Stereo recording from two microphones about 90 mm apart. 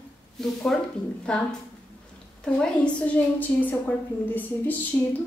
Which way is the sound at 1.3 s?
10° left (ahead or behind).